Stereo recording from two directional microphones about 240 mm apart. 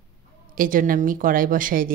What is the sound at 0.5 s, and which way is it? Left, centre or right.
A woman's voice, right.